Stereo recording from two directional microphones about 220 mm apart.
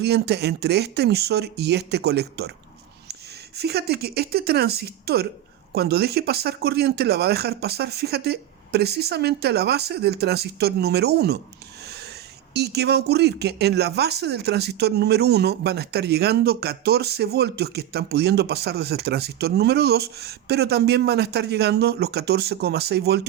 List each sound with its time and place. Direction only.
0.0 s speech: 50° right (ahead or behind)
12.5 s speech: 50° right (ahead or behind)